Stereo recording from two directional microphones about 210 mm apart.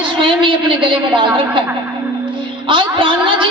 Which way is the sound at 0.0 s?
25° right (ahead or behind).